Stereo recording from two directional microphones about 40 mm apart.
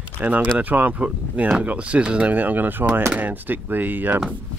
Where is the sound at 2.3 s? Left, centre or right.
Right.